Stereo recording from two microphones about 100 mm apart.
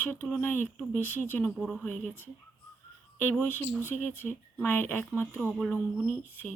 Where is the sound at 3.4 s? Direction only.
20° left (ahead or behind).